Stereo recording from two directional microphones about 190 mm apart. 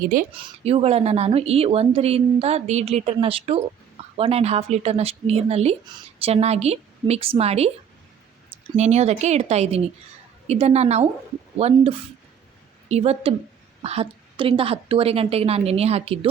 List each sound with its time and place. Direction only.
0.3 s a woman's voice: 30° right (ahead or behind)
8.7 s a woman's voice: 35° right (ahead or behind)